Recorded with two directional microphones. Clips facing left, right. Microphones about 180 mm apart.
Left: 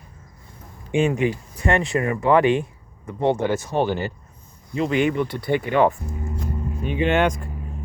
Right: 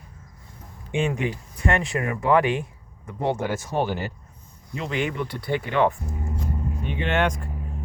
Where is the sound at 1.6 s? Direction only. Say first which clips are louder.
Left 3 dB; 5° right (ahead or behind).